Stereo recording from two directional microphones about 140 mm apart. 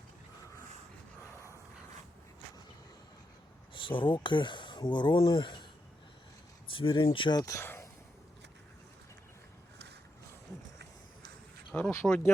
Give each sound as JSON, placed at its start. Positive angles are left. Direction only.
{"t": 3.8, "sound": "speech", "side_deg": 35}
{"t": 6.7, "sound": "speech", "side_deg": 40}
{"t": 11.7, "sound": "speech", "side_deg": 10}